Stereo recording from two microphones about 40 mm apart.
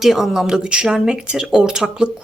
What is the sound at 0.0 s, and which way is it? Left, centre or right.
Speech, centre.